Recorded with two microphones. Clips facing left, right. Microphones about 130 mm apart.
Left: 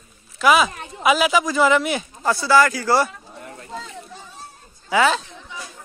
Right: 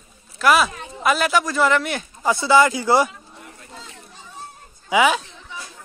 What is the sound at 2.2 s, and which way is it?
Speech, 20° right (ahead or behind).